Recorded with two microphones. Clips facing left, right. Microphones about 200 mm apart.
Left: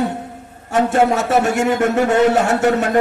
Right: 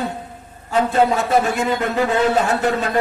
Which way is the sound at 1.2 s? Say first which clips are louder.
Left 2 dB; 75° left (ahead or behind).